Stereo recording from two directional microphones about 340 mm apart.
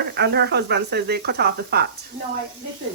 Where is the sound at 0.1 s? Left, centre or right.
Right.